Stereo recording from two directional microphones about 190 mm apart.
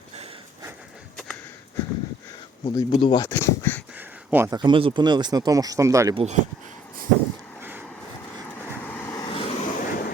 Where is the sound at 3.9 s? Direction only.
10° right (ahead or behind).